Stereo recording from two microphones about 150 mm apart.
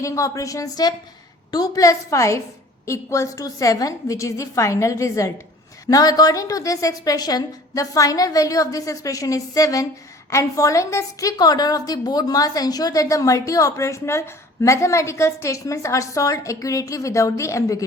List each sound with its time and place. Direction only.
0.0 s a woman's voice: 20° left (ahead or behind)